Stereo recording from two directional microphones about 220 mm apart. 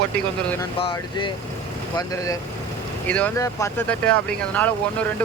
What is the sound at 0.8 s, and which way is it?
Speech, 20° left (ahead or behind).